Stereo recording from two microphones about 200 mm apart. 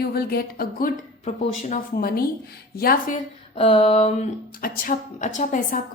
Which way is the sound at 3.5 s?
25° left (ahead or behind).